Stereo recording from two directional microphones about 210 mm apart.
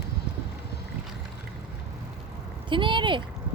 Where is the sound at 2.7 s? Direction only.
25° right (ahead or behind).